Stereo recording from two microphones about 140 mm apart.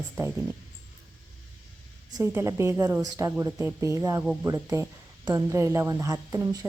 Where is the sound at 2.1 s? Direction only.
20° right (ahead or behind).